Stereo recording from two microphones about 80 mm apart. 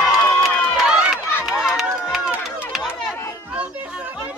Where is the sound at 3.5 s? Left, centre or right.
Centre.